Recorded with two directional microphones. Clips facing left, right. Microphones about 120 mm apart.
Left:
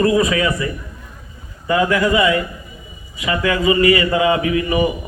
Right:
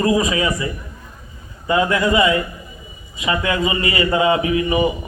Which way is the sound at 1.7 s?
25° right (ahead or behind).